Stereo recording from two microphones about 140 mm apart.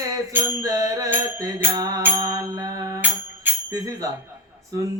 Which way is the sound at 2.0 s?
20° right (ahead or behind).